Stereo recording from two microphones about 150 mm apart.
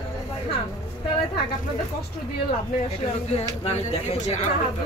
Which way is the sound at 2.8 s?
45° left (ahead or behind).